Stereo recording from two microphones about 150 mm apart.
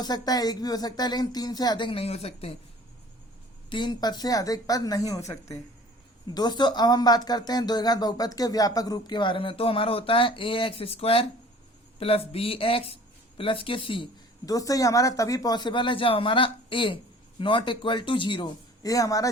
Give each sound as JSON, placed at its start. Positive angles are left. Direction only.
{"t": 0.0, "sound": "speech", "side_deg": 25}
{"t": 3.7, "sound": "speech", "side_deg": 30}
{"t": 14.4, "sound": "speech", "side_deg": 25}